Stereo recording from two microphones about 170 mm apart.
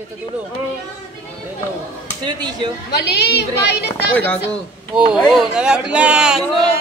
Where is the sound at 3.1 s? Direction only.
75° left (ahead or behind).